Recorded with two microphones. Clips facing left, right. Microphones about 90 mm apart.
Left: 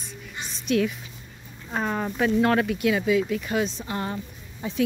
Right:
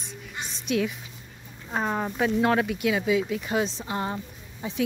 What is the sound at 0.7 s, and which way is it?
Speech, 15° right (ahead or behind).